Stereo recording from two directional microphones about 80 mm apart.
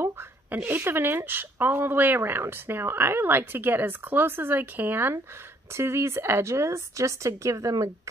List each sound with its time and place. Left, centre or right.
0.0 s speech: right